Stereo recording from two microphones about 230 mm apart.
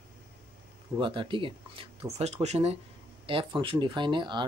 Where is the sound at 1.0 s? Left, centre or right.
Right.